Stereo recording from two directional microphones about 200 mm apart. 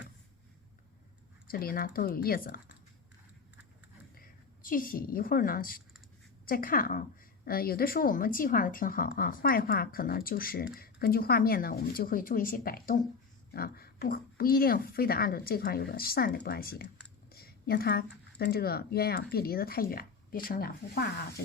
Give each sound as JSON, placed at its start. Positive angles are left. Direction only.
{"t": 1.5, "sound": "speech", "side_deg": 45}
{"t": 4.1, "sound": "a woman's voice", "side_deg": 45}